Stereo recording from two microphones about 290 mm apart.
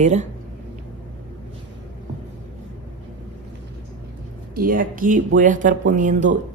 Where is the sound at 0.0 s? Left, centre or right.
Right.